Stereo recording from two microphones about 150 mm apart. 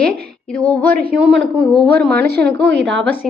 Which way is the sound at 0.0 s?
90° right.